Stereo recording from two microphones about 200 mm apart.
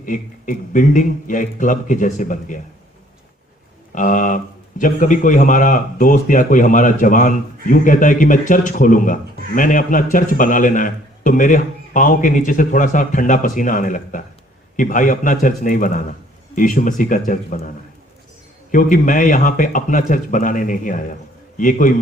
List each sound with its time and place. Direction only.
0.0 s a man's voice: 40° left (ahead or behind)
3.9 s a man's voice: 40° left (ahead or behind)
18.7 s a man's voice: 40° left (ahead or behind)